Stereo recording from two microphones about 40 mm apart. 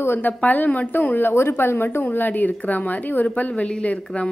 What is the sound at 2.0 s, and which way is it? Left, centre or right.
A woman's voice, left.